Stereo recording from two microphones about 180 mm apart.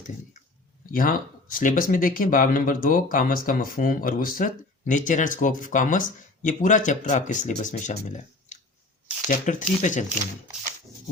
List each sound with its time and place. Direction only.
0.9 s speech: 50° left (ahead or behind)